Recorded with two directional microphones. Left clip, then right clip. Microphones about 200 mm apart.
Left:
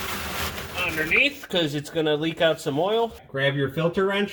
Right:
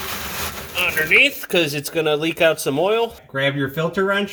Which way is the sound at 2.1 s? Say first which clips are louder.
Right 5 dB; 60° right (ahead or behind).